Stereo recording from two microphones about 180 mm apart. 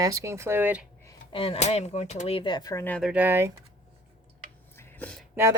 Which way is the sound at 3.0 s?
5° right (ahead or behind).